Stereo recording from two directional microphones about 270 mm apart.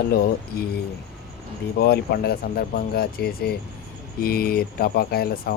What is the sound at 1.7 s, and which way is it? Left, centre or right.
Speech, left.